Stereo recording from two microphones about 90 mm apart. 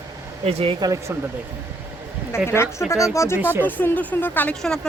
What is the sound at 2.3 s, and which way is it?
Speech, 30° left (ahead or behind).